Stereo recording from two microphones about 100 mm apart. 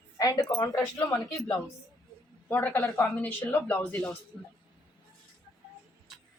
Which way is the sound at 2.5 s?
15° left (ahead or behind).